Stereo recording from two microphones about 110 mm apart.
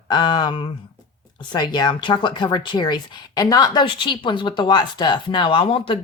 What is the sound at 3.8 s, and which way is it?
Speech, 45° left (ahead or behind).